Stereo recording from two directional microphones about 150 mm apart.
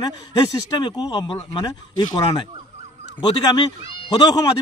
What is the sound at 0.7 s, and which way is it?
Speech, 30° left (ahead or behind).